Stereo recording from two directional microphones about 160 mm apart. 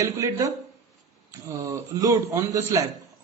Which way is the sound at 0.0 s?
20° right (ahead or behind).